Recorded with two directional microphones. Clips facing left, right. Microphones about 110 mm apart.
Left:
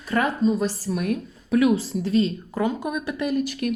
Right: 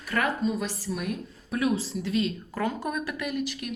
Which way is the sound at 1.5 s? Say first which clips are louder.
Left 7 dB; 90° left.